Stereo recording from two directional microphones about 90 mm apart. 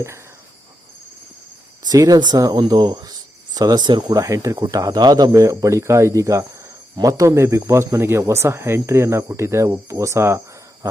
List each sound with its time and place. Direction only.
1.8 s speech: 45° right (ahead or behind)
4.2 s speech: 35° right (ahead or behind)